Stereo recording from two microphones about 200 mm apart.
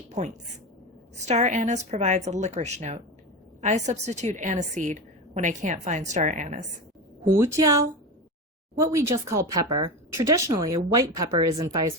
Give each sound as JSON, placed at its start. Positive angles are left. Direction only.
{"t": 1.2, "sound": "a woman's voice", "side_deg": -35}
{"t": 7.4, "sound": "speech", "side_deg": -15}
{"t": 8.8, "sound": "speech", "side_deg": -15}